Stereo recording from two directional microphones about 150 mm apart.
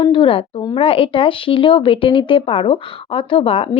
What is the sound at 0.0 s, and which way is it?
Speech, 35° left (ahead or behind).